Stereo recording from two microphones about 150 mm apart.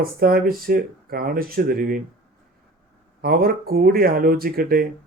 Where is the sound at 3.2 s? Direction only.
80° right.